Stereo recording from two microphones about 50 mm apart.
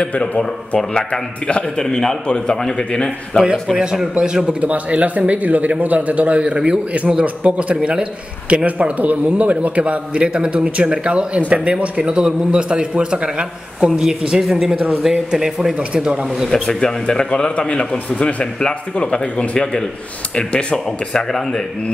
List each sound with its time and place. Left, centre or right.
0.0 s a man's voice: left
3.7 s a man's voice: centre
4.6 s a man's voice: right; by 15.7 s centre
15.9 s a man's voice: right
16.5 s a man's voice: centre